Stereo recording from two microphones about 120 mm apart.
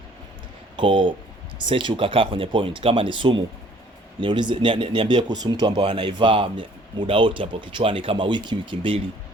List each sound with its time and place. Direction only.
0.8 s speech: 45° right (ahead or behind)